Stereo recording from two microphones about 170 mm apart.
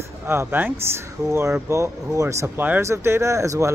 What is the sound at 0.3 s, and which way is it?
Speech, 15° right (ahead or behind).